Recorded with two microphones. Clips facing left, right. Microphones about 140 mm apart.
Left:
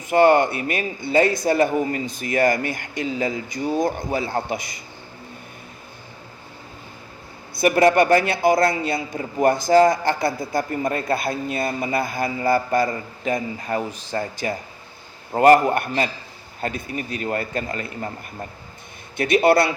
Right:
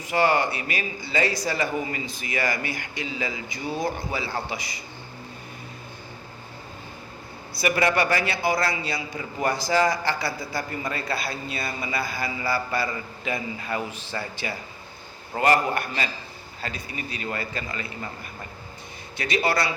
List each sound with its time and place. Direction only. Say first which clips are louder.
0.1 s a man's voice: left 7 dB; 50° left (ahead or behind)
7.5 s a man's voice: left 7 dB; 50° left (ahead or behind)
19.1 s speech: left 8 dB; 55° left (ahead or behind)